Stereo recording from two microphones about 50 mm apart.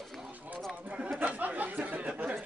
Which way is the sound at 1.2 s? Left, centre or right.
Right.